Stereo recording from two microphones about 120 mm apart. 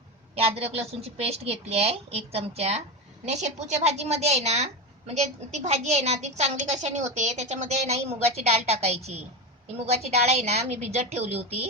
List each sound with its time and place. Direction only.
0.3 s a woman's voice: 55° right (ahead or behind)
3.2 s a woman's voice: 75° right (ahead or behind)